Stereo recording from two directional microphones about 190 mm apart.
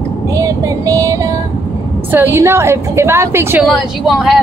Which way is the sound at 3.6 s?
Centre (ahead or behind).